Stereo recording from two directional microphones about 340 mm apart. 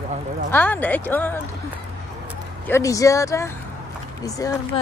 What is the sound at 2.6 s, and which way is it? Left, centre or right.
Speech, centre.